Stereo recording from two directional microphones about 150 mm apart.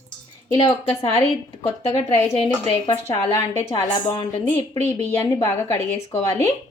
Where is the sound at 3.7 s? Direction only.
35° left (ahead or behind).